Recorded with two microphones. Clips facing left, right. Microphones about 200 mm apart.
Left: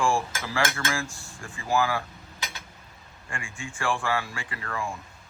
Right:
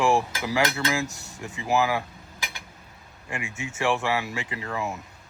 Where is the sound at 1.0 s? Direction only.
40° right (ahead or behind).